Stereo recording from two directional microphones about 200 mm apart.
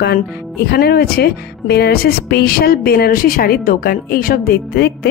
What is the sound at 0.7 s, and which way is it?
A woman's voice, 50° left (ahead or behind).